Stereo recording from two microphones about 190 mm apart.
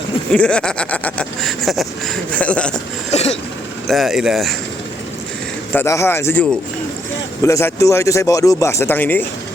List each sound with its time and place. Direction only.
0.3 s speech: 5° left (ahead or behind)
3.1 s throat clearing: 35° left (ahead or behind)
3.8 s speech: centre (ahead or behind)
5.7 s speech: 15° left (ahead or behind)
7.4 s speech: 15° left (ahead or behind)